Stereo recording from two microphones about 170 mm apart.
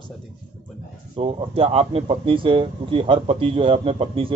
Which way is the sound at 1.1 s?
35° right (ahead or behind).